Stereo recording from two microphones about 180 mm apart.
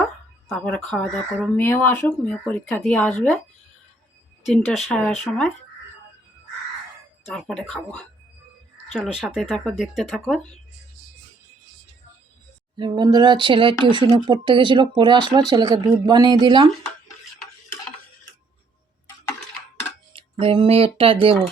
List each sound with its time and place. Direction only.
0.4 s speech: 5° left (ahead or behind)
4.4 s speech: centre (ahead or behind)
7.3 s speech: centre (ahead or behind)
12.7 s speech: 25° right (ahead or behind)
20.1 s speech: 30° right (ahead or behind)